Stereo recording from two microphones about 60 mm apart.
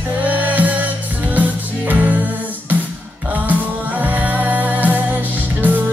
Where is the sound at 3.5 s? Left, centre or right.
Right.